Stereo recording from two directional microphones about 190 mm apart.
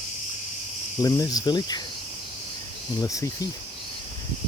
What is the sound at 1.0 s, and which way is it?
Speech, 20° left (ahead or behind).